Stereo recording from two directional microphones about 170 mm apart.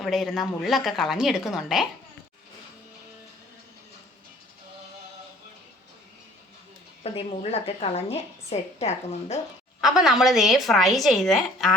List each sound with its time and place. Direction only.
0.0 s a woman's voice: centre (ahead or behind)
7.0 s a woman's voice: 35° left (ahead or behind)
9.8 s a woman's voice: 5° right (ahead or behind)